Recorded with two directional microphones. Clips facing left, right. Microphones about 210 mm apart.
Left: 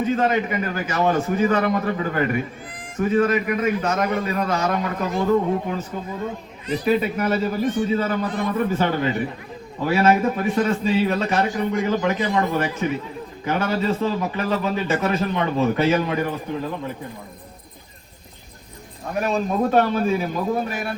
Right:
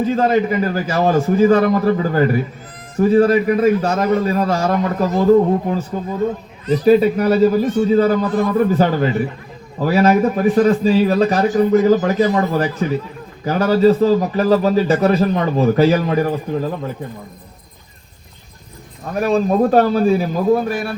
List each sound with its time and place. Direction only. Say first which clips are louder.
0.0 s a man's voice: right 5 dB; 35° right (ahead or behind)
19.2 s a man's voice: right 7 dB; 35° right (ahead or behind)